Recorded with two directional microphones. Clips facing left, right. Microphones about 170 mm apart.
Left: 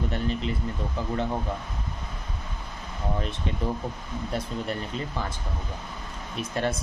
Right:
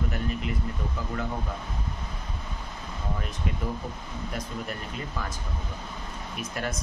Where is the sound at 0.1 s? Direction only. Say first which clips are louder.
Left 3 dB; 30° left (ahead or behind).